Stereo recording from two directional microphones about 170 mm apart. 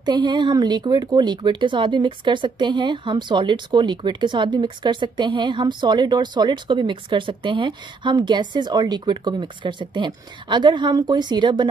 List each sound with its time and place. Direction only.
0.0 s speech: 25° right (ahead or behind)